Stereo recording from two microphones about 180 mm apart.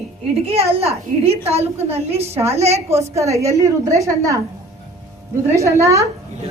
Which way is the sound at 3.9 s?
15° right (ahead or behind).